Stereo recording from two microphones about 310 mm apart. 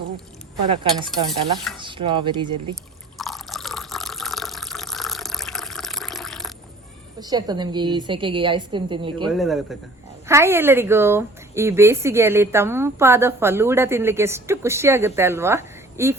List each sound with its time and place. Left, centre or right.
0.7 s speech: centre
3.2 s water: centre
7.2 s speech: centre
9.2 s speech: centre